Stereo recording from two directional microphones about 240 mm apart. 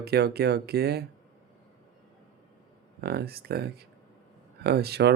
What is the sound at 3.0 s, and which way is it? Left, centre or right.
Speech, right.